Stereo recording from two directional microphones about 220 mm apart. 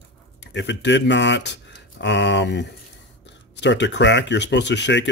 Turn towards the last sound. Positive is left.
turn(degrees=50)  # may be behind; listen again after turning